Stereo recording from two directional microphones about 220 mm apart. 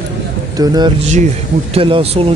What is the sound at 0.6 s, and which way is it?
Speech, 20° right (ahead or behind).